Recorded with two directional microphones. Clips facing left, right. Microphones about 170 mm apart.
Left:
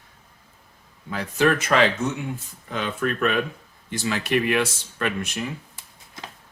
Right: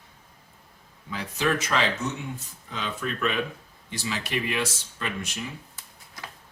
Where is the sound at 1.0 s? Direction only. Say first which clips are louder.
Left 6 dB; 55° left (ahead or behind).